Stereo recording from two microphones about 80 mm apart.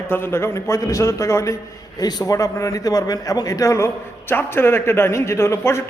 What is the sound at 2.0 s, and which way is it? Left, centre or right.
A man's voice, left.